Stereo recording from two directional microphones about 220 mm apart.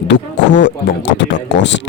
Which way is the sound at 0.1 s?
55° left (ahead or behind).